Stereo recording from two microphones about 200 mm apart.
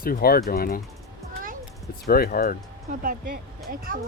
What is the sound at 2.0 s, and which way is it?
Speech, 50° left (ahead or behind).